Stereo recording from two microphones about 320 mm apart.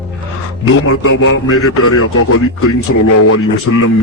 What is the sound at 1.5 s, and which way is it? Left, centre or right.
Speech, left.